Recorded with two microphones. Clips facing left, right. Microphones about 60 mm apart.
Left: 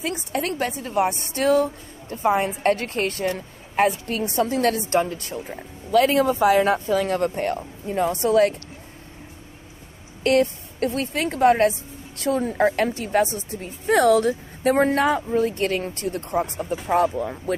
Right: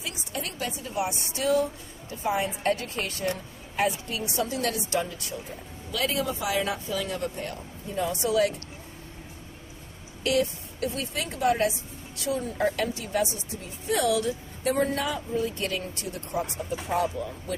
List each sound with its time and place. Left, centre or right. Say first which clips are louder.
0.0 s a woman's voice: left 9 dB; left
10.2 s a woman's voice: left 6 dB; left